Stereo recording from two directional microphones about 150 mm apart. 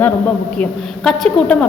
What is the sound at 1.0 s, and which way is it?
Speech, 5° left (ahead or behind).